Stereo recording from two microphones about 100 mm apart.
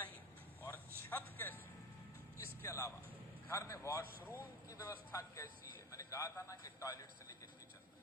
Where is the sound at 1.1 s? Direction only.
20° left (ahead or behind).